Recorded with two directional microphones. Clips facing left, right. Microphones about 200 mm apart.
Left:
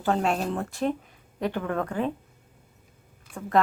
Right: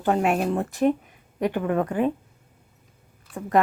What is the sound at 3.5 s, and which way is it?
Speech, 15° right (ahead or behind).